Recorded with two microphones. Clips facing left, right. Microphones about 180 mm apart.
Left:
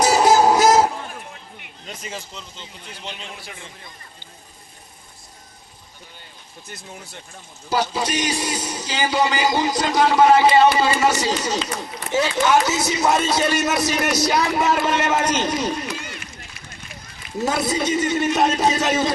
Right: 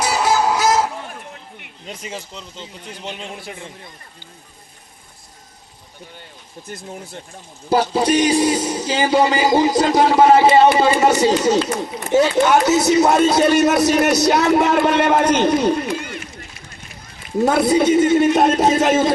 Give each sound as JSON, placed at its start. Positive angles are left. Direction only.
{"t": 0.0, "sound": "a sound", "side_deg": 35}
{"t": 1.9, "sound": "speech", "side_deg": -15}
{"t": 2.6, "sound": "a man's voice", "side_deg": -40}
{"t": 7.7, "sound": "speech", "side_deg": -30}
{"t": 10.8, "sound": "a man's voice", "side_deg": -50}
{"t": 13.9, "sound": "speech", "side_deg": -40}
{"t": 14.6, "sound": "a man's voice", "side_deg": -60}
{"t": 17.4, "sound": "a man's voice", "side_deg": -55}